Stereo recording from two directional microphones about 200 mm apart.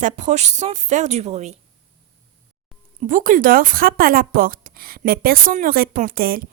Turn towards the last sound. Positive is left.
turn(degrees=-45)  # may be behind; listen again after turning